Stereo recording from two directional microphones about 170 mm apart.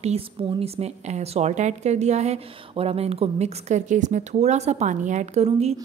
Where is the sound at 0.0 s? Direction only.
35° right (ahead or behind).